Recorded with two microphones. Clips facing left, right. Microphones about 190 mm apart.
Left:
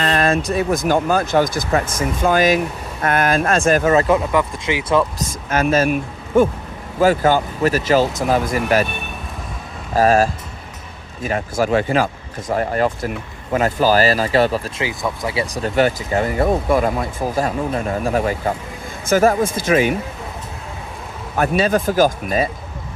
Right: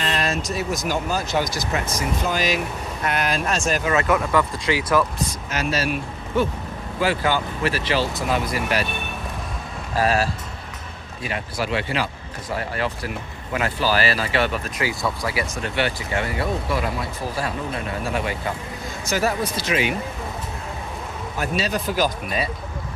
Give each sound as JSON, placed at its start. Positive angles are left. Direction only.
{"t": 0.0, "sound": "speech", "side_deg": 50}
{"t": 3.9, "sound": "speech", "side_deg": 25}
{"t": 5.3, "sound": "speech", "side_deg": 50}
{"t": 9.9, "sound": "speech", "side_deg": 45}
{"t": 14.8, "sound": "speech", "side_deg": 20}
{"t": 15.5, "sound": "speech", "side_deg": 40}
{"t": 21.3, "sound": "speech", "side_deg": 55}